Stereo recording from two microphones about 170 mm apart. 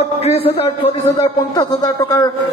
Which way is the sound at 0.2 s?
35° left (ahead or behind).